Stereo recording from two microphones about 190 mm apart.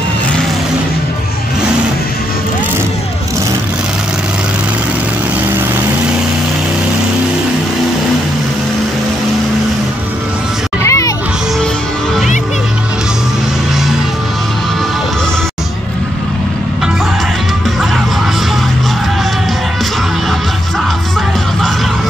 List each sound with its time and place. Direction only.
10.8 s music: 15° left (ahead or behind)